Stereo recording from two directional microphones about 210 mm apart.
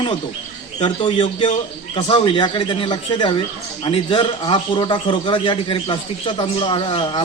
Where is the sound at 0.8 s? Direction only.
25° left (ahead or behind).